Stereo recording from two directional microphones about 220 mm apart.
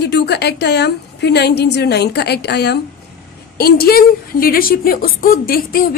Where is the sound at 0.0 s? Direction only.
50° left (ahead or behind).